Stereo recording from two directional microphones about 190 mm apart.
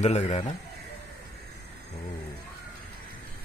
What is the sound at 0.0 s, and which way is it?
Speech, 35° left (ahead or behind).